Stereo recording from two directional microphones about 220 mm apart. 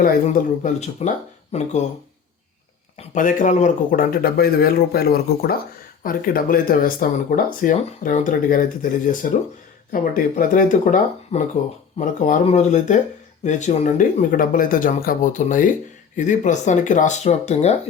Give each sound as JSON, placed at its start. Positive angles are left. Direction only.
{"t": 0.0, "sound": "speech", "side_deg": 40}
{"t": 3.0, "sound": "speech", "side_deg": 35}